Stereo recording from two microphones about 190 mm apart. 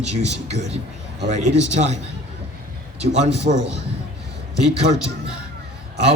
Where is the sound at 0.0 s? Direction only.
35° right (ahead or behind).